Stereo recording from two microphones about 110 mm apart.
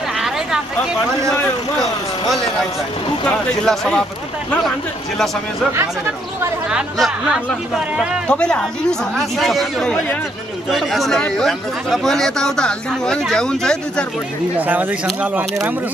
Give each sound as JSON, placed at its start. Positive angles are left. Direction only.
{"t": 3.3, "sound": "speech", "side_deg": 5}
{"t": 6.7, "sound": "speech", "side_deg": -5}
{"t": 8.3, "sound": "speech", "side_deg": 10}
{"t": 14.6, "sound": "speech", "side_deg": -15}